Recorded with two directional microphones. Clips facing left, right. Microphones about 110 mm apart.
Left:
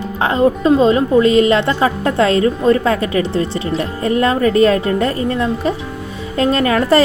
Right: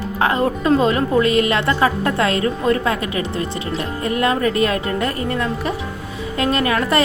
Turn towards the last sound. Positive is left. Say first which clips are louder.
# left 5 dB
turn(degrees=30)  # may be behind; listen again after turning